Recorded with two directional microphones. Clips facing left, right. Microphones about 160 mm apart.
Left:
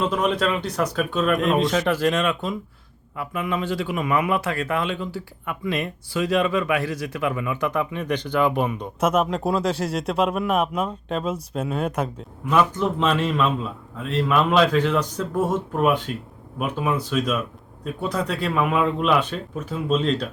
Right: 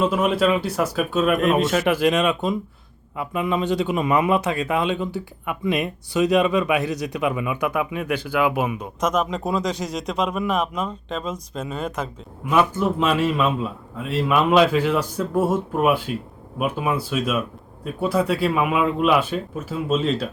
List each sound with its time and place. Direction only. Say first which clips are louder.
0.0 s speech: right 3 dB; 5° right (ahead or behind)
9.0 s speech: left 2 dB; 5° left (ahead or behind)
12.5 s speech: right 1 dB; 10° right (ahead or behind)